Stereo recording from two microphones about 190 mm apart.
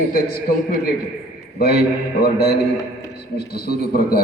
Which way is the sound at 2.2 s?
60° left (ahead or behind).